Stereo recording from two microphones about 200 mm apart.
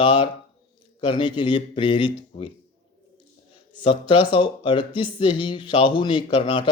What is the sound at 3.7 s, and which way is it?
Speech, 25° left (ahead or behind).